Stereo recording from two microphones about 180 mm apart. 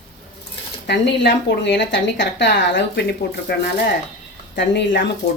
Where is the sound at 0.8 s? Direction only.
70° left (ahead or behind).